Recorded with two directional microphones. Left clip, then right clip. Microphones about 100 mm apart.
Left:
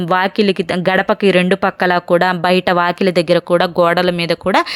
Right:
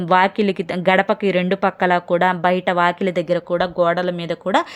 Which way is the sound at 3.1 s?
30° left (ahead or behind).